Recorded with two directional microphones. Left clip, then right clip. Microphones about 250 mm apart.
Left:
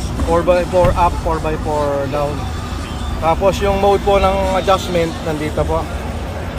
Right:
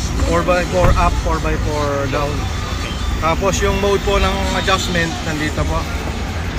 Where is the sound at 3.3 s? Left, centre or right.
Left.